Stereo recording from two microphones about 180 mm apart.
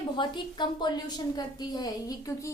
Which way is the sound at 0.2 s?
25° left (ahead or behind).